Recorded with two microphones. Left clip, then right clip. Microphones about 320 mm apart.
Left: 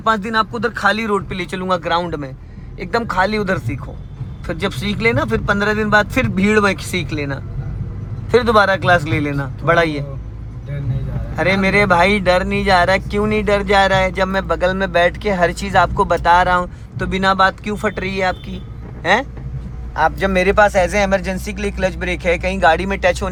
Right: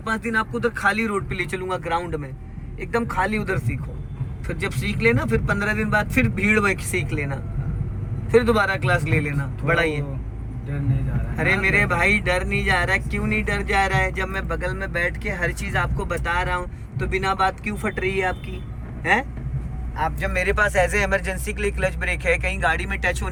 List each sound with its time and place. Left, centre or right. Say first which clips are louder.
0.0 s speech: left 7 dB; centre
11.3 s speech: left 5 dB; centre